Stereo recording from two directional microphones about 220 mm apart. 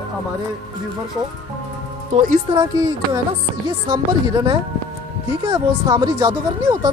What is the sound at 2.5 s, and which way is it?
Speech, 20° right (ahead or behind).